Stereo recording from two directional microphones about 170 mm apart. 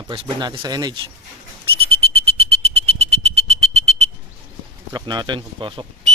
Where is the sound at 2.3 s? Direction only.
35° right (ahead or behind).